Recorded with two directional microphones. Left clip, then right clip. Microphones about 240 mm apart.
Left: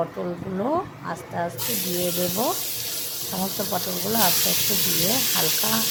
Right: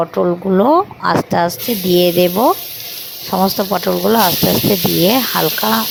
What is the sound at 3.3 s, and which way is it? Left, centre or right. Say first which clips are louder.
Speech: right 13 dB; right.